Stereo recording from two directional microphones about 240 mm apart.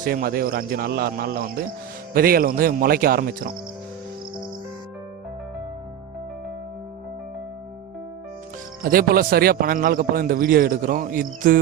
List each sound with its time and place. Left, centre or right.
0.0 s a man's voice: right
8.8 s a man's voice: right